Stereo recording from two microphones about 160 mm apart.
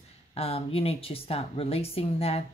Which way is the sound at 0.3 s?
40° left (ahead or behind).